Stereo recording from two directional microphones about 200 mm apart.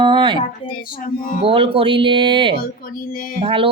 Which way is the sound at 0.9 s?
45° left (ahead or behind).